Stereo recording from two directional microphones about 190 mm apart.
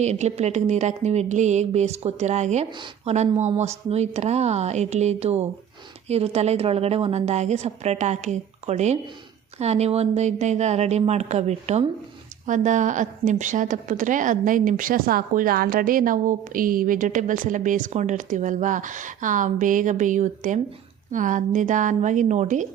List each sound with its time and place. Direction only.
0.0 s a woman's voice: 35° right (ahead or behind)